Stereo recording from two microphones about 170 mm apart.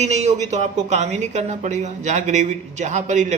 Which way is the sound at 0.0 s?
40° right (ahead or behind).